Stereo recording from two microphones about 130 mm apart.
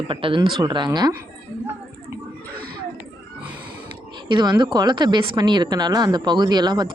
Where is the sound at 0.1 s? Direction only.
40° right (ahead or behind).